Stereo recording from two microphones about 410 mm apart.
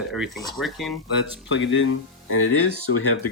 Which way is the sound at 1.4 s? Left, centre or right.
Left.